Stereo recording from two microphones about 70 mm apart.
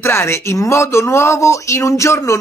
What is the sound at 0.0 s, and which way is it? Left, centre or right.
Speech, left.